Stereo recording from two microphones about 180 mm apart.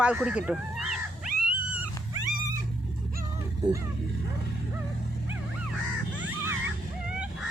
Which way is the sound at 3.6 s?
20° right (ahead or behind).